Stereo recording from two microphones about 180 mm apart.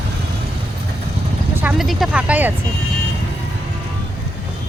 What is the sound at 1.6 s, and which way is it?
Speech, 5° right (ahead or behind).